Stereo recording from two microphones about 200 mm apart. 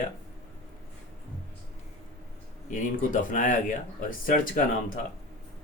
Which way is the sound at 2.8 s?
40° left (ahead or behind).